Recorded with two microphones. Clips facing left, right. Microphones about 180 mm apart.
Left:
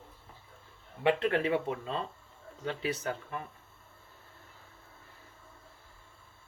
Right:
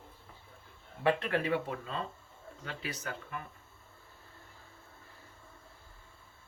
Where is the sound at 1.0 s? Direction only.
25° left (ahead or behind).